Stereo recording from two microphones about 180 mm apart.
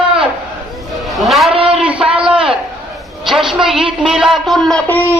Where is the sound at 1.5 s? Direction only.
30° right (ahead or behind).